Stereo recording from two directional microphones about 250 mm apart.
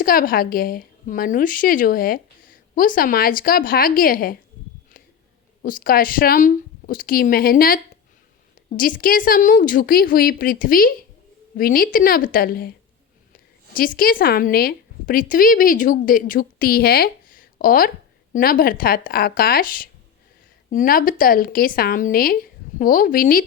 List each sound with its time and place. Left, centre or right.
0.0 s a woman's voice: left
5.6 s a woman's voice: left
13.7 s a woman's voice: left